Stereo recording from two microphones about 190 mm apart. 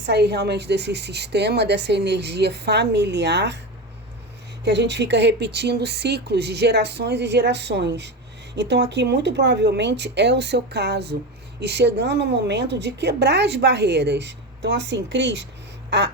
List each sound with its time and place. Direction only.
0.0 s a woman's voice: 60° right (ahead or behind)
4.6 s a woman's voice: 65° right (ahead or behind)